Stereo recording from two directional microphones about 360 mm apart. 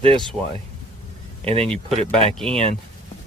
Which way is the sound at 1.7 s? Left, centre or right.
Centre.